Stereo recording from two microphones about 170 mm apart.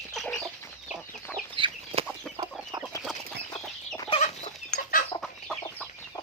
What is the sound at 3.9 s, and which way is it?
Chicken, 35° left (ahead or behind).